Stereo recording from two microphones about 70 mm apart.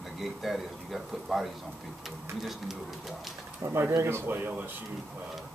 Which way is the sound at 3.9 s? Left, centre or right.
Right.